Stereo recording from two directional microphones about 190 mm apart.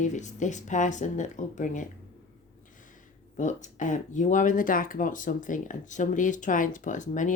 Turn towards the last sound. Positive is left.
turn(degrees=40)  # may be behind; listen again after turning